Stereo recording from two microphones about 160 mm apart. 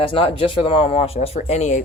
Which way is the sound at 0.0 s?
35° left (ahead or behind).